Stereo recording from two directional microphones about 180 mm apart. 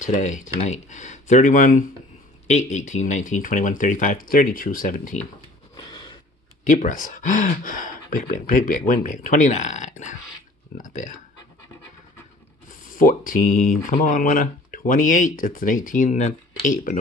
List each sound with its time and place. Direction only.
0.0 s speech: 45° left (ahead or behind)
5.8 s a sound: 25° left (ahead or behind)
6.7 s speech: 45° left (ahead or behind)
12.8 s speech: 50° left (ahead or behind)